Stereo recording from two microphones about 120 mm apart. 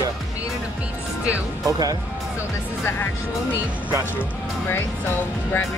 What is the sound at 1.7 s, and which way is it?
Speech, 30° right (ahead or behind).